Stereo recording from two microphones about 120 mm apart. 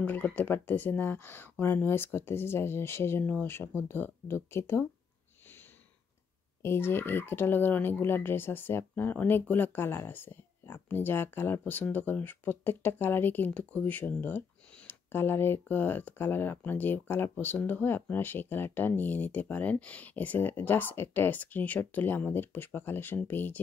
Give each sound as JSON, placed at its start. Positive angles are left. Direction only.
{"t": 0.0, "sound": "speech", "side_deg": 15}
{"t": 6.6, "sound": "speech", "side_deg": 20}